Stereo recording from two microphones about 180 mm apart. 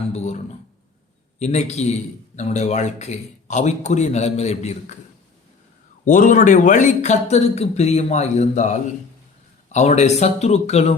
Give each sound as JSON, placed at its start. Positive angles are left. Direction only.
{"t": 0.1, "sound": "a sound", "side_deg": 40}
{"t": 1.4, "sound": "a man's voice", "side_deg": 40}
{"t": 6.1, "sound": "a man's voice", "side_deg": 45}